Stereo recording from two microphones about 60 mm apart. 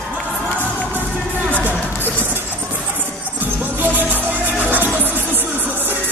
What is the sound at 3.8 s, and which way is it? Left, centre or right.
Music, right.